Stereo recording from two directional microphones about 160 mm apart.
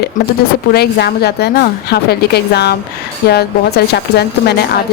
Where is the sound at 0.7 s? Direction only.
75° left (ahead or behind).